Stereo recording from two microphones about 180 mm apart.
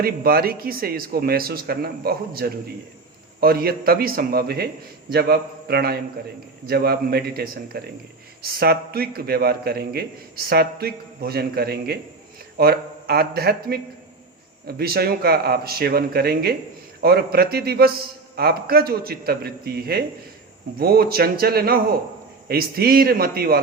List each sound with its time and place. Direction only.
0.0 s a man's voice: 55° right (ahead or behind)